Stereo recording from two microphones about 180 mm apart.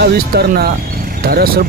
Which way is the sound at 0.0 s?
60° right (ahead or behind).